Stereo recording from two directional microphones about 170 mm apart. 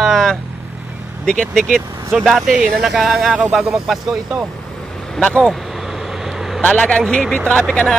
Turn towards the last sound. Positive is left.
turn(degrees=5)  # may be behind; listen again after turning